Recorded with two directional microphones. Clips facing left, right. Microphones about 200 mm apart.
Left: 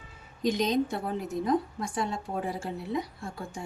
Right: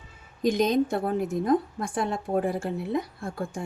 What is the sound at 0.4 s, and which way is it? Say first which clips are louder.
A woman's voice: right 4 dB; 50° right (ahead or behind).